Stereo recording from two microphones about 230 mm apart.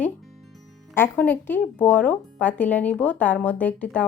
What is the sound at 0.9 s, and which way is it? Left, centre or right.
Speech, centre.